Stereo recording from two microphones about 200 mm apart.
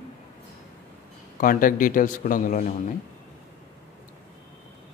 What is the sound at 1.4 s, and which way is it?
Speech, 45° left (ahead or behind).